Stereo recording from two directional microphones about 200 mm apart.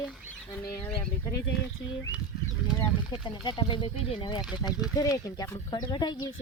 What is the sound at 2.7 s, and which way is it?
Speech, 20° left (ahead or behind).